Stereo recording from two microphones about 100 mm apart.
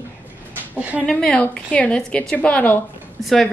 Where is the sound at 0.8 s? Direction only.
15° right (ahead or behind).